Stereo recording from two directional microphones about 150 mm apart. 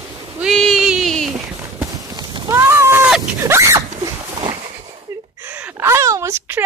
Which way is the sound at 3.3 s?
20° right (ahead or behind).